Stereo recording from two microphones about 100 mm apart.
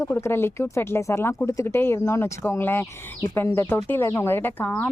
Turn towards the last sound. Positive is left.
turn(degrees=15)  # may be behind; listen again after turning